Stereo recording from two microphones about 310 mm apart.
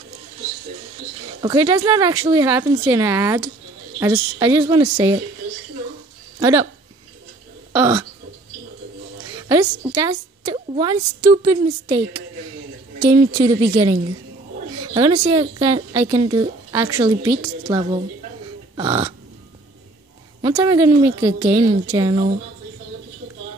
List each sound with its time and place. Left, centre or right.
1.4 s a woman's voice: centre
6.4 s a woman's voice: centre
7.7 s speech: centre
9.4 s a woman's voice: centre
13.0 s a woman's voice: centre
15.0 s a woman's voice: centre
20.4 s a woman's voice: centre